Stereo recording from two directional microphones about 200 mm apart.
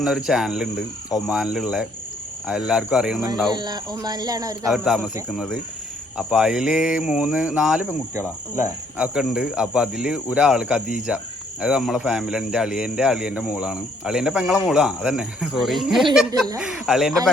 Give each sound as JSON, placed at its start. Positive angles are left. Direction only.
{"t": 0.3, "sound": "speech", "side_deg": 0}
{"t": 3.5, "sound": "speech", "side_deg": -20}
{"t": 4.6, "sound": "speech", "side_deg": 0}
{"t": 8.5, "sound": "cricket", "side_deg": -10}
{"t": 9.1, "sound": "speech", "side_deg": -5}